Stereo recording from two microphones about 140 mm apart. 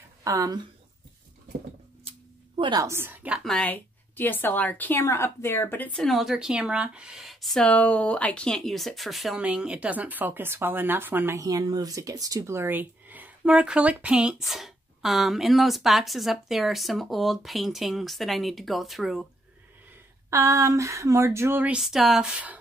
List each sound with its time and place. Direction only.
0.2 s speech: 25° right (ahead or behind)
2.0 s a sound: 35° right (ahead or behind)
2.8 s a woman's voice: 20° right (ahead or behind)
3.4 s a woman's voice: 10° left (ahead or behind)
5.9 s speech: centre (ahead or behind)
20.2 s speech: 20° right (ahead or behind)